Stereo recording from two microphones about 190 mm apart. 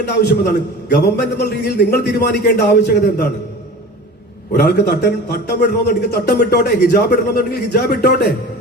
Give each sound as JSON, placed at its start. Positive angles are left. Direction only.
{"t": 0.1, "sound": "a man's voice", "side_deg": 60}
{"t": 4.5, "sound": "a man's voice", "side_deg": 60}